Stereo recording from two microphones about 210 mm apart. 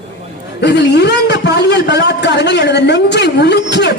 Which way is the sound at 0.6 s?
55° left (ahead or behind).